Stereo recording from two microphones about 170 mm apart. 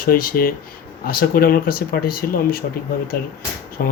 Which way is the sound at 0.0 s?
60° left (ahead or behind).